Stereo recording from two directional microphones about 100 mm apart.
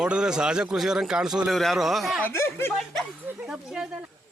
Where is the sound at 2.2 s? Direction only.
25° left (ahead or behind).